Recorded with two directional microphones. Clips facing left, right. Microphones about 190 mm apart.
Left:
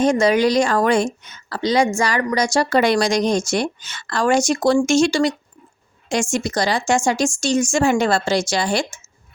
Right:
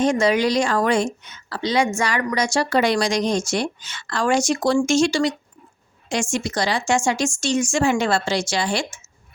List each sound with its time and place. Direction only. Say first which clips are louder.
0.0 s a woman's voice: left 3 dB; 40° left (ahead or behind)